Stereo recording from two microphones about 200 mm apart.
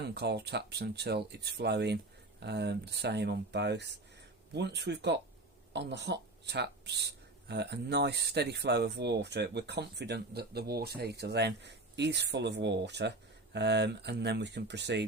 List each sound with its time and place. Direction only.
0.0 s speech: 55° right (ahead or behind)